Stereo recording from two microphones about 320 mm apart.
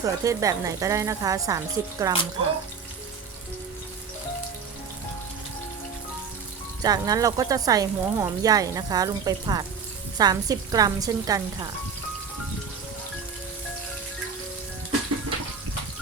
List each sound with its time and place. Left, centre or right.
0.0 s speech: centre
6.8 s speech: centre